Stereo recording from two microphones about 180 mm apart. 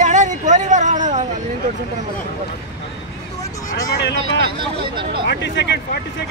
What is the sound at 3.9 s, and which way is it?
Speech, 70° left (ahead or behind).